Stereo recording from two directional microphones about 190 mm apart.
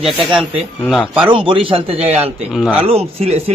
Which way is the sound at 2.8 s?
30° right (ahead or behind).